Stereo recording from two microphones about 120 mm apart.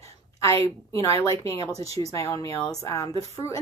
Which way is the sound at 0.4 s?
25° left (ahead or behind).